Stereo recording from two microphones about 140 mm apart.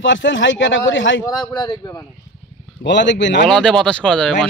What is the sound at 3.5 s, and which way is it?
Speech, 5° left (ahead or behind).